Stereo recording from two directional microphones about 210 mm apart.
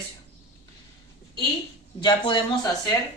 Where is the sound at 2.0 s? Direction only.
20° left (ahead or behind).